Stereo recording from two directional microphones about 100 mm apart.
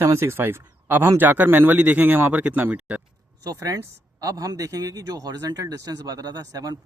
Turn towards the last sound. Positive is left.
turn(degrees=-40)  # may be behind; listen again after turning